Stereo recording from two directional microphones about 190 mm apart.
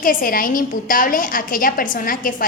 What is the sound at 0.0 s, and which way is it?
A woman's voice, 45° left (ahead or behind).